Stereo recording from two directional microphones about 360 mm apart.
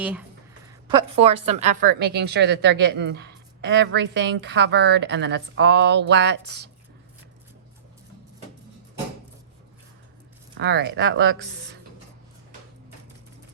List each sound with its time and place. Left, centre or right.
0.0 s a woman's voice: centre; by 6.7 s right
10.6 s a woman's voice: right